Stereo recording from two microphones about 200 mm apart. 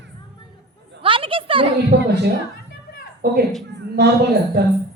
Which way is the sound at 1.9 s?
55° right (ahead or behind).